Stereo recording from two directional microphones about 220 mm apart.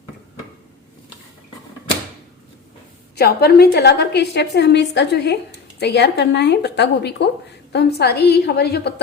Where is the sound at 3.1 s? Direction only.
45° left (ahead or behind).